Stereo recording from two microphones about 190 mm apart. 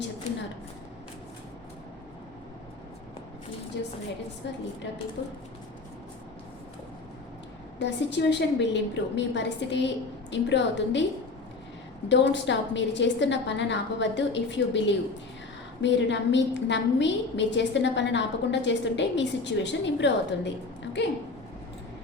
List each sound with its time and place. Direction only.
4.4 s a woman's voice: 65° left (ahead or behind)
7.8 s a woman's voice: 65° left (ahead or behind)
12.0 s a woman's voice: 70° left (ahead or behind)